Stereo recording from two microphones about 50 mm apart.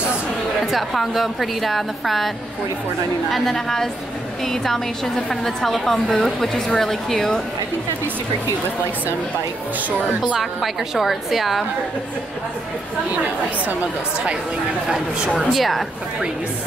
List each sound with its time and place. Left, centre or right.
0.6 s a woman's voice: centre
10.3 s a woman's voice: centre
15.3 s a woman's voice: centre